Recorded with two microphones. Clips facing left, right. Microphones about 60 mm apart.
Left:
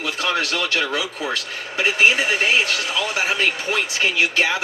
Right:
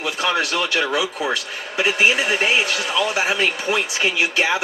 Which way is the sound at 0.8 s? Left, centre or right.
Right.